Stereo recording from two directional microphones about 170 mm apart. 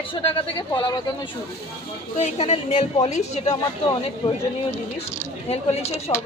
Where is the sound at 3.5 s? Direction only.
30° left (ahead or behind).